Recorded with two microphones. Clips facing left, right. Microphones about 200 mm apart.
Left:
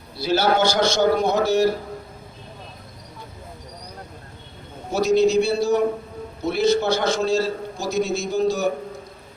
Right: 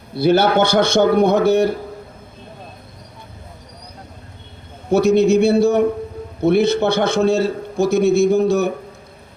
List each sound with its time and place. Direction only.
0.1 s a man's voice: 55° right (ahead or behind)
4.9 s a man's voice: 55° right (ahead or behind)